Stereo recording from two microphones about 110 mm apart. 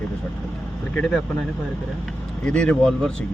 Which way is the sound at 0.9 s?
10° left (ahead or behind).